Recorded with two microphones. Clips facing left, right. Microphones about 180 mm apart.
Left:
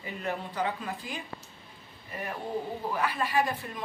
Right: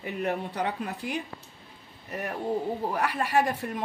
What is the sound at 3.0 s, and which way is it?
Speech, 80° right.